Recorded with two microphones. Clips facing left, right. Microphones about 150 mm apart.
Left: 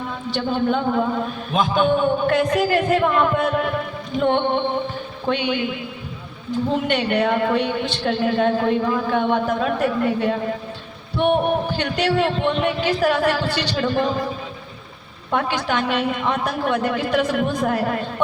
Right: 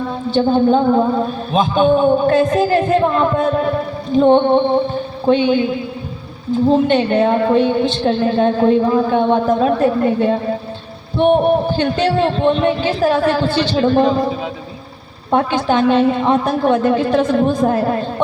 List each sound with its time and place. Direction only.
0.3 s a man's voice: 30° right (ahead or behind)
11.2 s music: 30° right (ahead or behind)
11.7 s a woman's voice: 30° right (ahead or behind)
15.3 s a woman's voice: 30° right (ahead or behind)